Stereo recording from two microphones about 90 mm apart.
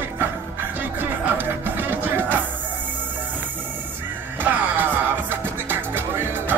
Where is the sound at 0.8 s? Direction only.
20° right (ahead or behind).